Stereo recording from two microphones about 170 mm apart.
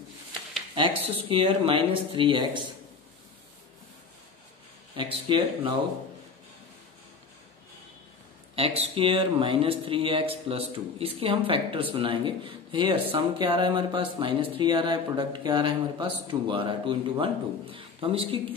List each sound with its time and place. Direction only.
0.7 s speech: 30° right (ahead or behind)
4.9 s speech: 30° right (ahead or behind)
8.5 s speech: 35° right (ahead or behind)